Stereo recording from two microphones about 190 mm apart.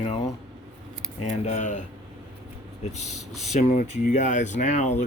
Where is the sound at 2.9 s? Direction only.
35° left (ahead or behind).